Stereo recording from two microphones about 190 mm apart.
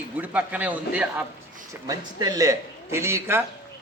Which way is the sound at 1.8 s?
20° right (ahead or behind).